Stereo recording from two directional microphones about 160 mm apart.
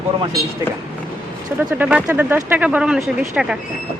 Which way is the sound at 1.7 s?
10° right (ahead or behind).